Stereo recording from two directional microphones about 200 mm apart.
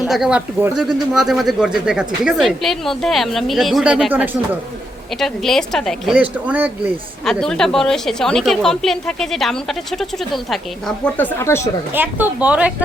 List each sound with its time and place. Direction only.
0.0 s a woman's voice: 5° right (ahead or behind); by 11.7 s 15° left (ahead or behind)
11.9 s a woman's voice: 10° right (ahead or behind)